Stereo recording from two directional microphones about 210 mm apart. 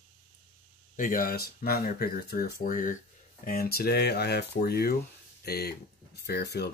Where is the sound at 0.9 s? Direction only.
40° left (ahead or behind).